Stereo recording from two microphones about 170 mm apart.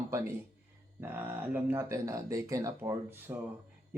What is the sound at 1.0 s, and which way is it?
Speech, 10° right (ahead or behind).